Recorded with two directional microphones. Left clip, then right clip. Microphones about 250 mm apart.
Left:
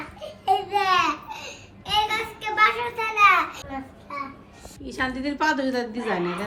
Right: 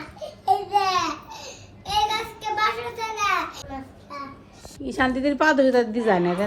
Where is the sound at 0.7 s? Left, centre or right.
Left.